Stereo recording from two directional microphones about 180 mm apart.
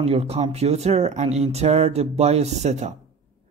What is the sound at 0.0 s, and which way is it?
Speech, 35° right (ahead or behind).